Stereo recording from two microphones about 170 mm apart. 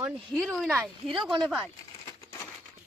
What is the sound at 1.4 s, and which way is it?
Speech, 5° right (ahead or behind).